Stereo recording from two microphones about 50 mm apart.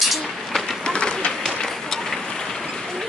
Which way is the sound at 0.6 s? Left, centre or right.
Centre.